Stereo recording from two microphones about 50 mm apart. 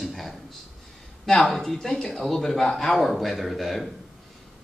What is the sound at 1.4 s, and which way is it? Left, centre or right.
Speech, centre.